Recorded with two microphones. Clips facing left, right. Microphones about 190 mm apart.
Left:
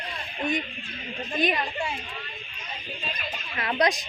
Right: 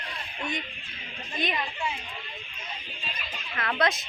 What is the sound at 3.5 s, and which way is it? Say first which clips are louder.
Speech: left 2 dB; 20° left (ahead or behind).